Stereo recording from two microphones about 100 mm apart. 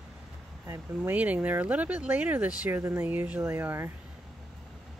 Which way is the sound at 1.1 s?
15° right (ahead or behind).